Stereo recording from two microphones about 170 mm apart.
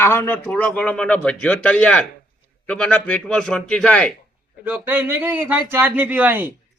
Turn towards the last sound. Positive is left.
turn(degrees=-10)  # may be behind; listen again after turning